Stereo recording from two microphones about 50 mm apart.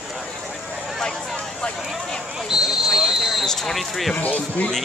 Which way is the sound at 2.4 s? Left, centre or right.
Centre.